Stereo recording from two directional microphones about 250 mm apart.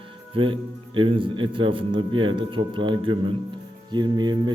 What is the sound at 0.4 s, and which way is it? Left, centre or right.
A man's voice, right.